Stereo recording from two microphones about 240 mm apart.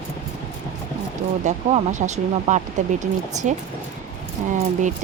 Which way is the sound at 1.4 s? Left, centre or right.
Right.